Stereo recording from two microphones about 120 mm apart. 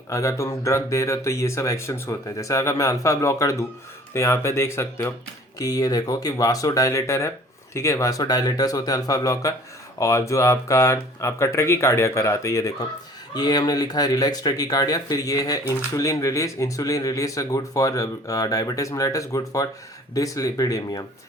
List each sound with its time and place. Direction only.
0.1 s speech: 25° left (ahead or behind)